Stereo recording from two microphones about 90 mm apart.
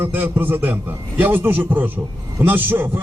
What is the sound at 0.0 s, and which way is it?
A man's voice, 20° right (ahead or behind).